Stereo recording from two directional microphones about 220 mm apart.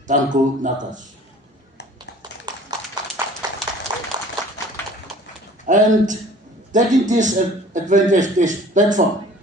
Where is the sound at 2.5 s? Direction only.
20° right (ahead or behind).